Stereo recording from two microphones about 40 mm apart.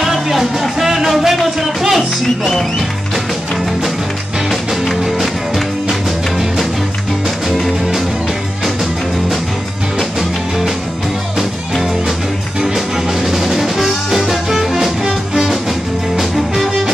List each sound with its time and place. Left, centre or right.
0.0 s music: centre
4.5 s music: centre
12.7 s music: centre
15.0 s music: right
16.2 s music: centre